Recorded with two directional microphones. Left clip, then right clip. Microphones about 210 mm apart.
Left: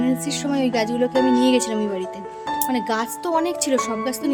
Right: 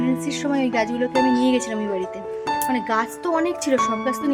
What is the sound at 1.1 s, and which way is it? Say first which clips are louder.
Speech: even; 20° right (ahead or behind).